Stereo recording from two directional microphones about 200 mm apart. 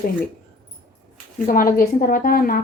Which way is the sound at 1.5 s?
45° left (ahead or behind).